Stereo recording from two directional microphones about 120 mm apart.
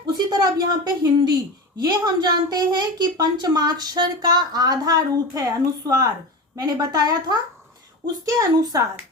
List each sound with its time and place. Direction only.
0.1 s speech: 35° right (ahead or behind)
6.6 s a woman's voice: 35° right (ahead or behind)